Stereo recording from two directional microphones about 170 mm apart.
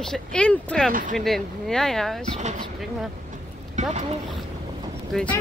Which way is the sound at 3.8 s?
45° right (ahead or behind).